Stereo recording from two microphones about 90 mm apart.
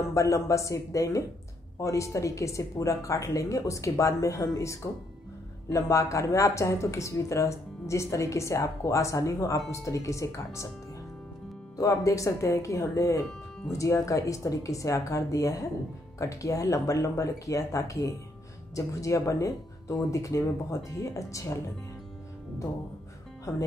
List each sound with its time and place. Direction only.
0.1 s speech: 35° left (ahead or behind)
11.8 s speech: 40° left (ahead or behind)
23.5 s speech: 35° left (ahead or behind)